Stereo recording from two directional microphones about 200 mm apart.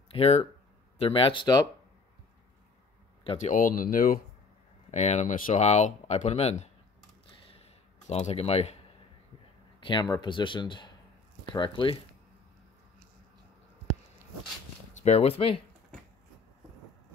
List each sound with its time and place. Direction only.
0.1 s speech: 30° left (ahead or behind)
3.3 s speech: 40° left (ahead or behind)
4.9 s speech: 35° left (ahead or behind)
8.1 s speech: 30° left (ahead or behind)
9.8 s speech: 25° left (ahead or behind)
15.0 s speech: 30° left (ahead or behind)